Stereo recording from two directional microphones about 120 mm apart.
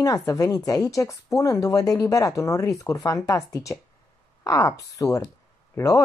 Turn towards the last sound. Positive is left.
turn(degrees=20)  # may be behind; listen again after turning